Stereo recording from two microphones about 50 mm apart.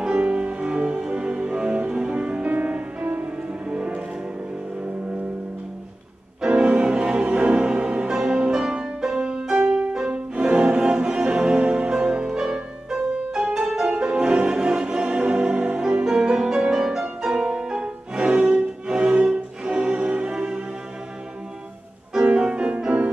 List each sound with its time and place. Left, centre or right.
0.0 s music: right
6.4 s music: centre
13.8 s music: right
22.2 s music: centre